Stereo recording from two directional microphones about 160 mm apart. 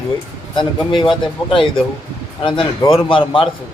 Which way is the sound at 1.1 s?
30° left (ahead or behind).